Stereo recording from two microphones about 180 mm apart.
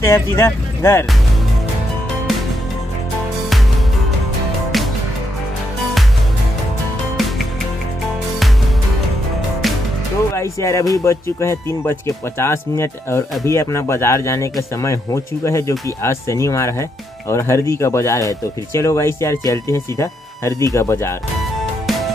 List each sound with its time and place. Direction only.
0.0 s speech: 15° left (ahead or behind)
10.3 s speech: 15° left (ahead or behind)